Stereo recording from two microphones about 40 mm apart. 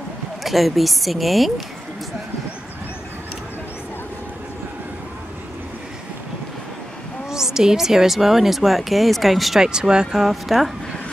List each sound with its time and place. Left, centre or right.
0.4 s speech: centre
7.2 s speech: centre
9.6 s speech: centre
10.3 s speech: centre